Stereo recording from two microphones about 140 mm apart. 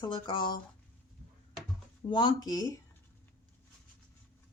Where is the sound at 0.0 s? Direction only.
35° left (ahead or behind).